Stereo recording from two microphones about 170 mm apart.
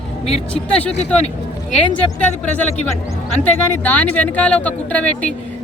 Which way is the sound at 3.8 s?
10° left (ahead or behind).